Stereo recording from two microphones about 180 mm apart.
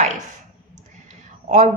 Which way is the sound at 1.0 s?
40° right (ahead or behind).